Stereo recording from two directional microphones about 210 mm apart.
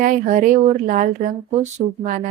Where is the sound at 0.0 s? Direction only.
40° right (ahead or behind).